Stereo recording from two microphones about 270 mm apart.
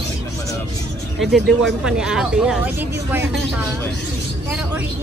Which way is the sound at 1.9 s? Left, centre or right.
Centre.